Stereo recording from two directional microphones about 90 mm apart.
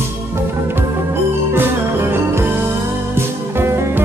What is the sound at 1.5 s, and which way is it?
Music, 25° right (ahead or behind).